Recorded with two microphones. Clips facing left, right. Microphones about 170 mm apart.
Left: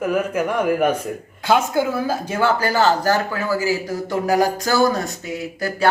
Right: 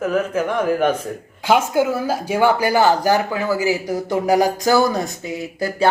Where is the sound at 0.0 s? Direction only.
10° left (ahead or behind).